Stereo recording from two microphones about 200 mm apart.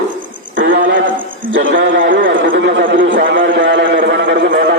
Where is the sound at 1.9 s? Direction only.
70° right (ahead or behind).